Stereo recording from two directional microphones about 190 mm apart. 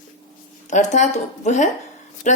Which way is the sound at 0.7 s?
40° left (ahead or behind).